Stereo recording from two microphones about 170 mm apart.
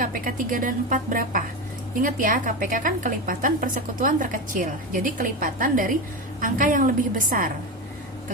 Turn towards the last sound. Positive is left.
turn(degrees=-55)  # may be behind; listen again after turning